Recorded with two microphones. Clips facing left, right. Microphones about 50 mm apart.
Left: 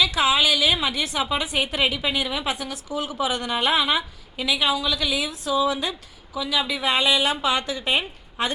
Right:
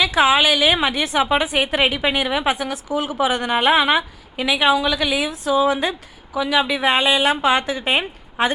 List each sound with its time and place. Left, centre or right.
0.2 s a woman's voice: right